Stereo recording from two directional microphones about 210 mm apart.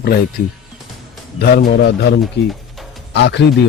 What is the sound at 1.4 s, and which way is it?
Speech, 50° left (ahead or behind).